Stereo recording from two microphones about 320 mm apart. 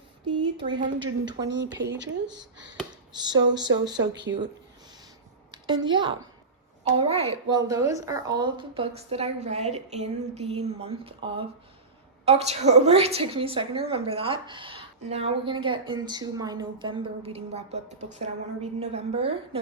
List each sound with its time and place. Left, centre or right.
0.3 s speech: centre
1.5 s speech: right
3.2 s a woman's voice: centre
4.3 s speech: right
5.5 s a woman's voice: centre